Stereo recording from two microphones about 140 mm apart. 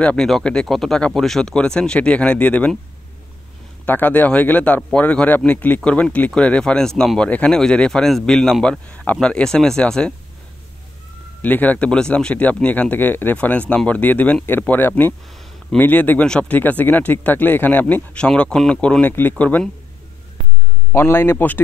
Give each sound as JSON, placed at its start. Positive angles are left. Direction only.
{"t": 0.0, "sound": "speech", "side_deg": 5}
{"t": 3.8, "sound": "speech", "side_deg": 10}
{"t": 11.4, "sound": "speech", "side_deg": 10}
{"t": 20.9, "sound": "speech", "side_deg": 15}